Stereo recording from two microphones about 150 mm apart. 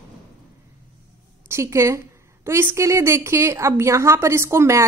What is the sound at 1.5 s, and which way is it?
A woman's voice, 20° right (ahead or behind).